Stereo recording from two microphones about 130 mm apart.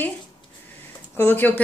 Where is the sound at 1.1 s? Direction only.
15° left (ahead or behind).